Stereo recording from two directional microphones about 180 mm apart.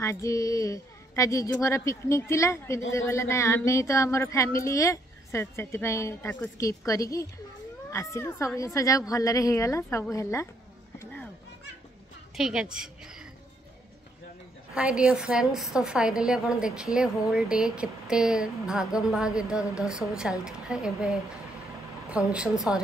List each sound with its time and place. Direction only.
0.0 s speech: 15° left (ahead or behind)
12.4 s a woman's voice: centre (ahead or behind)
12.7 s a sound: 5° right (ahead or behind)
14.8 s a woman's voice: 5° right (ahead or behind)
22.3 s a woman's voice: 5° right (ahead or behind)